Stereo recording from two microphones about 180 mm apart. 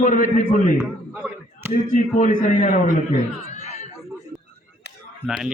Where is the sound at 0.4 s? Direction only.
10° right (ahead or behind).